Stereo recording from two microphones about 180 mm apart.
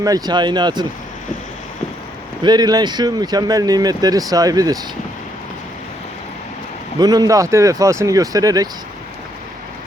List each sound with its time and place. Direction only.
0.0 s speech: 20° right (ahead or behind)
2.4 s speech: 25° right (ahead or behind)
7.0 s speech: 20° right (ahead or behind)